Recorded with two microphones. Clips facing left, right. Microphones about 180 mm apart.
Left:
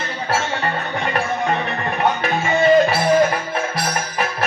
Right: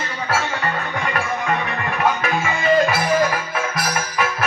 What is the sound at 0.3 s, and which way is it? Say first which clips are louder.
Music: left 1 dB; 30° left (ahead or behind).